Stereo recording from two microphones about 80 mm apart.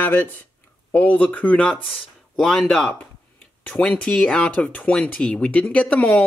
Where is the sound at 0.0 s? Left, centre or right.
Left.